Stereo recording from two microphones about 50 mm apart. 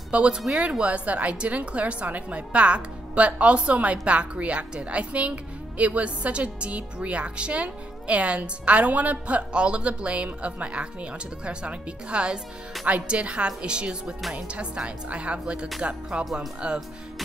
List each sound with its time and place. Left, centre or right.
0.1 s a woman's voice: right